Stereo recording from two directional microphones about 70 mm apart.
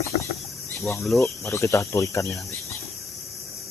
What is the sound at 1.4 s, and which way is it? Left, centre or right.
Speech, left.